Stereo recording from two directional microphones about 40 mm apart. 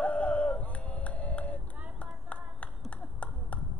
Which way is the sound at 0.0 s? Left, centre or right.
Left.